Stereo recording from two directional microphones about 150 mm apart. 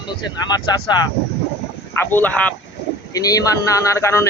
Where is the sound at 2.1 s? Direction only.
10° left (ahead or behind).